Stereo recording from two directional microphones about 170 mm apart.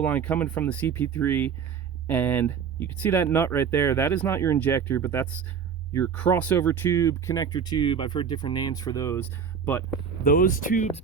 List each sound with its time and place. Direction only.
0.0 s speech: 10° left (ahead or behind)
10.2 s speech: 55° left (ahead or behind)